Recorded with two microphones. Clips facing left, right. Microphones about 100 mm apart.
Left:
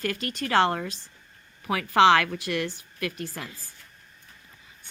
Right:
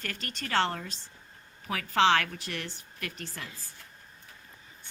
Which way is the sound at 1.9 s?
55° left (ahead or behind).